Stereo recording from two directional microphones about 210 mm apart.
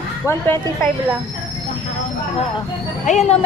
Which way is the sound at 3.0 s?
35° left (ahead or behind).